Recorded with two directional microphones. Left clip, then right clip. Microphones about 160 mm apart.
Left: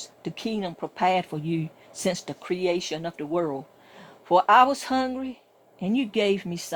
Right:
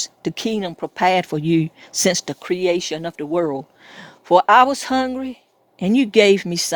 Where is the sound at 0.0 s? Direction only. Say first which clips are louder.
Right 9 dB; 45° right (ahead or behind).